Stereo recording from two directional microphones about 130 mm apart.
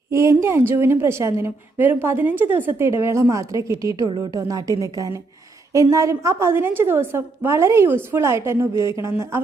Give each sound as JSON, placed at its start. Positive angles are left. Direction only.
{"t": 0.1, "sound": "a woman's voice", "side_deg": -20}